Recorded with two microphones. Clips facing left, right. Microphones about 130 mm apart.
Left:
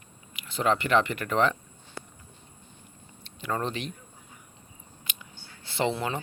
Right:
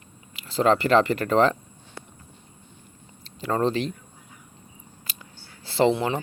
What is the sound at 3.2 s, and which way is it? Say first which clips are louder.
Speech: right 7 dB; 30° right (ahead or behind).